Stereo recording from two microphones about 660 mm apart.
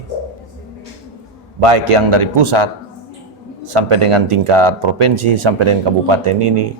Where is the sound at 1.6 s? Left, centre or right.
Right.